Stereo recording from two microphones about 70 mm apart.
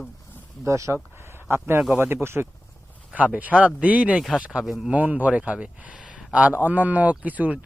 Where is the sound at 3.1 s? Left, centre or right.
Centre.